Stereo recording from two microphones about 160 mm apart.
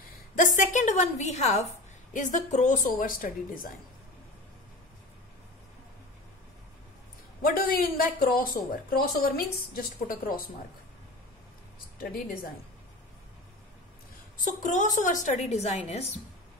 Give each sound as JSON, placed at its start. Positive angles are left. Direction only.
{"t": 0.4, "sound": "a woman's voice", "side_deg": 50}
{"t": 7.4, "sound": "speech", "side_deg": 60}
{"t": 12.0, "sound": "speech", "side_deg": 60}
{"t": 14.3, "sound": "a woman's voice", "side_deg": 55}